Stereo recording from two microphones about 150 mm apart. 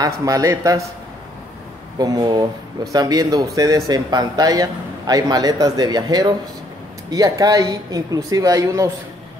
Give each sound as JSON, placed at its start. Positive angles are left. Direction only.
{"t": 0.0, "sound": "a man's voice", "side_deg": -20}
{"t": 2.0, "sound": "a man's voice", "side_deg": -25}